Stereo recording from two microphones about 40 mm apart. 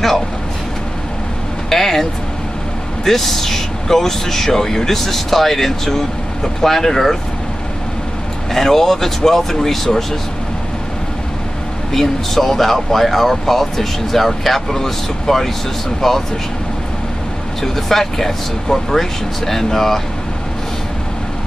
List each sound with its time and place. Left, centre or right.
1.7 s speech: centre
3.1 s speech: centre
8.5 s speech: centre
11.9 s speech: centre
17.7 s speech: centre